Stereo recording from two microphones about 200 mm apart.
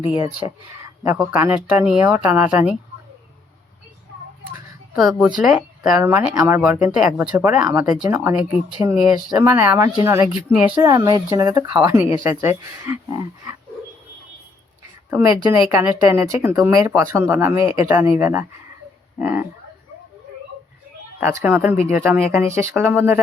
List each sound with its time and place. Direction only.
0.0 s speech: 25° left (ahead or behind)
1.0 s speech: 5° right (ahead or behind)
4.9 s speech: centre (ahead or behind)
10.8 s speech: 20° right (ahead or behind)
15.1 s speech: 15° right (ahead or behind)
21.2 s speech: 10° right (ahead or behind)